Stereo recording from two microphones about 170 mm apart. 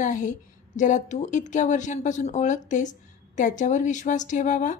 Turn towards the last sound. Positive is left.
turn(degrees=45)  # may be behind; listen again after turning